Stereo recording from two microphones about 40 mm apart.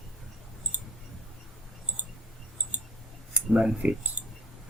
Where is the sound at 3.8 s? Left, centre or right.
Right.